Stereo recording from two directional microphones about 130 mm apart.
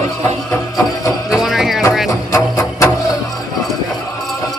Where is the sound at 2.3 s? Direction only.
25° left (ahead or behind).